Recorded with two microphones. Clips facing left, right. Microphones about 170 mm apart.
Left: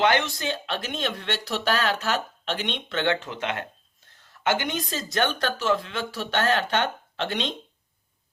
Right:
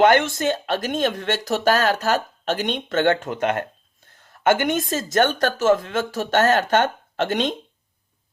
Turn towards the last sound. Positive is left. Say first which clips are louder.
# right 7 dB
turn(degrees=-45)  # may be behind; listen again after turning